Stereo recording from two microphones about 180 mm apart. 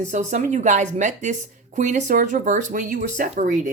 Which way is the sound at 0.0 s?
45° right (ahead or behind).